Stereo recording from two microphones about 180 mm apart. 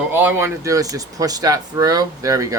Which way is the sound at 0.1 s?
10° right (ahead or behind).